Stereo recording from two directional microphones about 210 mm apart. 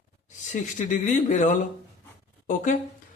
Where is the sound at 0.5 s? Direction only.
35° left (ahead or behind).